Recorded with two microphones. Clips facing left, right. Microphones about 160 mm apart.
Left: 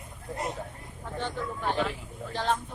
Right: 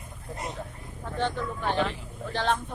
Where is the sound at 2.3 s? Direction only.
75° right (ahead or behind).